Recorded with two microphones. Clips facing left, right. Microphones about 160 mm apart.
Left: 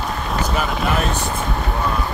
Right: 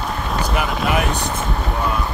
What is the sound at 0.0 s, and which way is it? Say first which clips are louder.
Vehicle: even; centre (ahead or behind).